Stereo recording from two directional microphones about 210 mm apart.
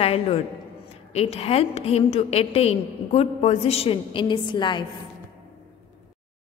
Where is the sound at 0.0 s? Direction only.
25° left (ahead or behind).